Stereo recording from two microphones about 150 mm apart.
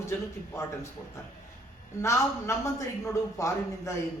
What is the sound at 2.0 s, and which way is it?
A man's voice, 20° left (ahead or behind).